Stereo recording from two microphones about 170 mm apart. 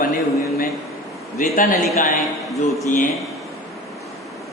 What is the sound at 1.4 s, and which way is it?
Speech, 55° left (ahead or behind).